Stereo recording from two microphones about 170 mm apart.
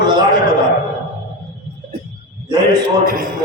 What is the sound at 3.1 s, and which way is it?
Speech, 55° right (ahead or behind).